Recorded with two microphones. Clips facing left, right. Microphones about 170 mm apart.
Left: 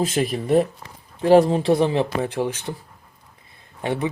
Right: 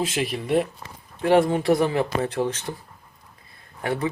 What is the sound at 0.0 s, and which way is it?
A man's voice, 45° left (ahead or behind).